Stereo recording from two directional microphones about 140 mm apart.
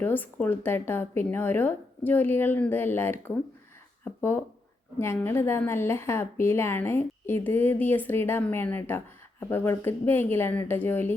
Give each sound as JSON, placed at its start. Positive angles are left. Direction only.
{"t": 0.0, "sound": "a woman's voice", "side_deg": 15}